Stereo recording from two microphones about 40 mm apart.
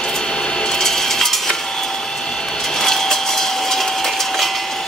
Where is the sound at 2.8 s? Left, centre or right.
Centre.